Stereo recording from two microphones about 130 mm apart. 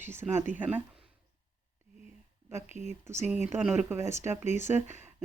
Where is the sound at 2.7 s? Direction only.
60° right (ahead or behind).